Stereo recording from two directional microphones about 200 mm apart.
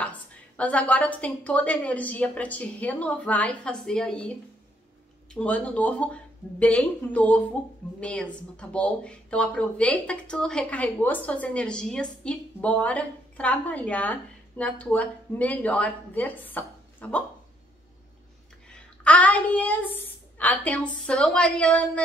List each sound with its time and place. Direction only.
0.6 s speech: 5° left (ahead or behind)
5.3 s speech: 5° left (ahead or behind)
18.7 s a woman's voice: 5° left (ahead or behind)